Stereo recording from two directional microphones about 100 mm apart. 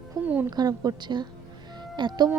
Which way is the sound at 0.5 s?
40° right (ahead or behind).